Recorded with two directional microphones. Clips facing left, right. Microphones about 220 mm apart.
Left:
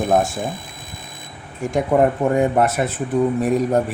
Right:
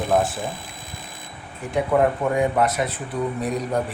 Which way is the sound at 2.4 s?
45° left (ahead or behind).